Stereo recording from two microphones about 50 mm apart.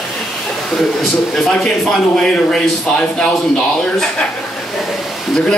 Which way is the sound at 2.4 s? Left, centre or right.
Centre.